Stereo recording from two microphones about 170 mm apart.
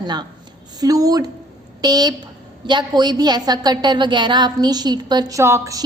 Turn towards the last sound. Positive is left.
turn(degrees=-15)  # may be behind; listen again after turning